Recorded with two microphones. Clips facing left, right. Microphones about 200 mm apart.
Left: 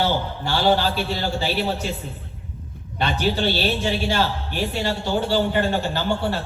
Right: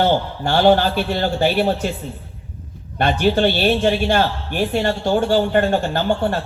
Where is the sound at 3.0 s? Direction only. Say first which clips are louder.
Right 6 dB; 50° right (ahead or behind).